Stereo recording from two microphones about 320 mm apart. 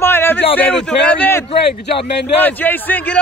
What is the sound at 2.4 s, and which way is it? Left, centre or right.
Speech, centre.